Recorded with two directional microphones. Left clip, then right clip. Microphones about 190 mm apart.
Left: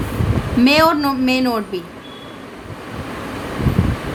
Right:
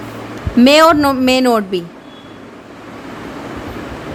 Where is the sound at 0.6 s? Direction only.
50° right (ahead or behind).